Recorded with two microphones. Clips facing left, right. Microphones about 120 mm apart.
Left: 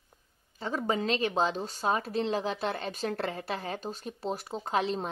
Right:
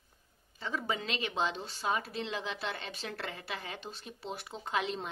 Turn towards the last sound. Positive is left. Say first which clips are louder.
# left 5 dB
turn(degrees=35)  # may be behind; listen again after turning